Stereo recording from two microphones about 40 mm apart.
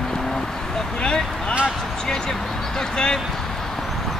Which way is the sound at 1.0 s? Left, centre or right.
Left.